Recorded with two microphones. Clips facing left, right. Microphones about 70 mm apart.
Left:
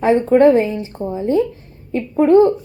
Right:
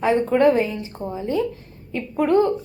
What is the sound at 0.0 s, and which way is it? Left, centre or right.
A woman's voice, left.